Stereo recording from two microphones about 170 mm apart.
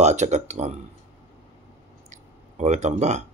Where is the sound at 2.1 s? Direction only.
45° right (ahead or behind).